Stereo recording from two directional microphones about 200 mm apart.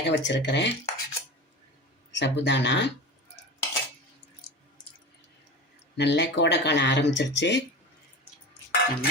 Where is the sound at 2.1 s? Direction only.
60° left (ahead or behind).